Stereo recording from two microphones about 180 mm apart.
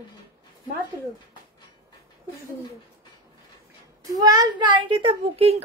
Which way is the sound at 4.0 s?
20° right (ahead or behind).